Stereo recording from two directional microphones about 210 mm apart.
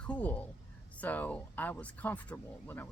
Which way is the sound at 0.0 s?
5° left (ahead or behind).